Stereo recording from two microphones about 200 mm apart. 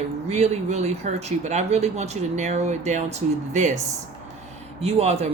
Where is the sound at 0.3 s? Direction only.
35° right (ahead or behind).